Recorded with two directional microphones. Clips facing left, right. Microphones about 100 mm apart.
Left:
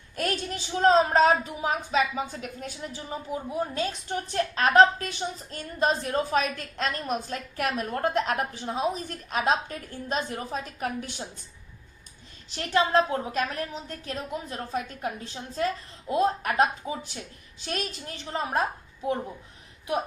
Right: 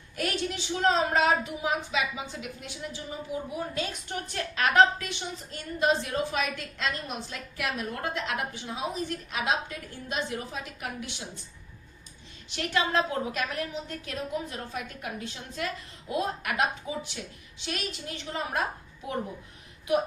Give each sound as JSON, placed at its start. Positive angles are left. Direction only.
{"t": 0.2, "sound": "a woman's voice", "side_deg": 40}
{"t": 12.5, "sound": "a woman's voice", "side_deg": 35}